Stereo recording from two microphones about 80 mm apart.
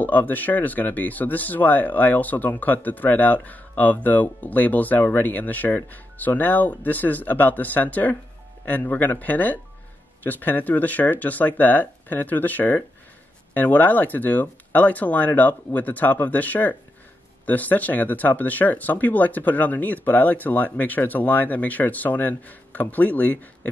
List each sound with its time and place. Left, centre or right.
0.0 s speech: left